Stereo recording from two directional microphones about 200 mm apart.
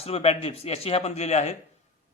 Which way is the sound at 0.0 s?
30° left (ahead or behind).